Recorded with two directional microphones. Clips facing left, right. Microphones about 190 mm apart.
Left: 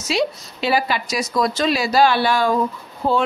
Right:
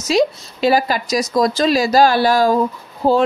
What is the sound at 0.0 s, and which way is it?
Speech, 40° right (ahead or behind).